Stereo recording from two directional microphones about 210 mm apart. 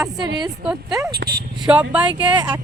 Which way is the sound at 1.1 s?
45° right (ahead or behind).